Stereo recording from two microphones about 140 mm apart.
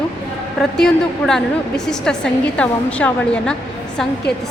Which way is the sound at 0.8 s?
5° left (ahead or behind).